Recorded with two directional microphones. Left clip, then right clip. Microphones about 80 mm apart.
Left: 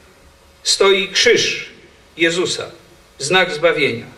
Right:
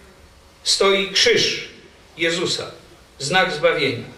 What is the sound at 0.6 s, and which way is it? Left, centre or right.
A man's voice, left.